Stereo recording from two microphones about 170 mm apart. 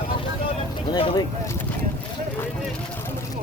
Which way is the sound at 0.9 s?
30° left (ahead or behind).